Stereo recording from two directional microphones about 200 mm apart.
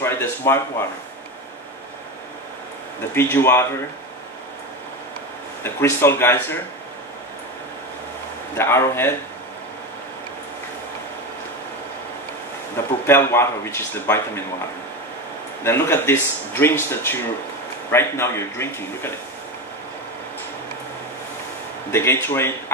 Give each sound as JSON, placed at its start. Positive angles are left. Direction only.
{"t": 0.0, "sound": "speech", "side_deg": 10}
{"t": 3.2, "sound": "speech", "side_deg": 10}
{"t": 5.6, "sound": "speech", "side_deg": 10}
{"t": 8.5, "sound": "speech", "side_deg": 10}
{"t": 13.0, "sound": "speech", "side_deg": 10}
{"t": 15.6, "sound": "speech", "side_deg": 10}
{"t": 21.9, "sound": "speech", "side_deg": 10}